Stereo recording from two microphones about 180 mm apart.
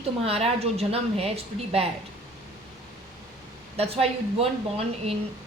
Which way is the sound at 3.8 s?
35° right (ahead or behind).